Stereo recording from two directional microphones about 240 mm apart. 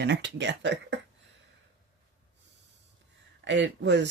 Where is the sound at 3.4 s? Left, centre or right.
Right.